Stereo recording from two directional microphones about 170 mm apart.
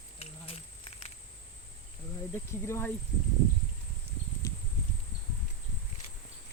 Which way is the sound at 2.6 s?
15° left (ahead or behind).